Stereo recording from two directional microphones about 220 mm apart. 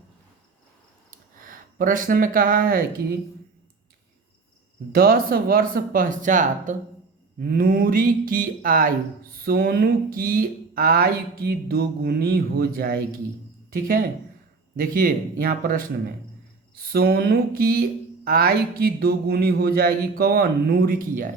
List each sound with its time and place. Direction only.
1.1 s speech: 40° right (ahead or behind)
4.9 s speech: 40° right (ahead or behind)